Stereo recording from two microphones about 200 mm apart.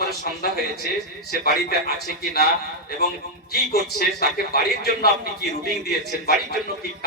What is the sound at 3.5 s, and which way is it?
Speech, 50° left (ahead or behind).